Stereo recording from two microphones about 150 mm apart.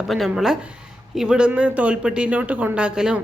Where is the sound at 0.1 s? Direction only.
Centre (ahead or behind).